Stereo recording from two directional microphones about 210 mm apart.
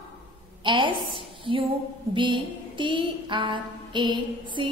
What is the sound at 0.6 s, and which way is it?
A woman's voice, 20° right (ahead or behind).